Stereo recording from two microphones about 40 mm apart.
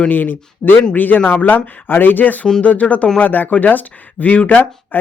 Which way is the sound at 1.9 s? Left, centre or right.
Left.